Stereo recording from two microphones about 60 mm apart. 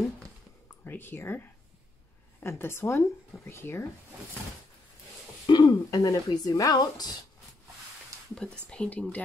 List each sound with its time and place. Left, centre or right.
0.8 s speech: left
5.6 s speech: left
8.4 s speech: centre